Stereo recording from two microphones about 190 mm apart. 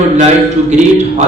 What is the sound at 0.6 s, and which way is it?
Speech, 35° right (ahead or behind).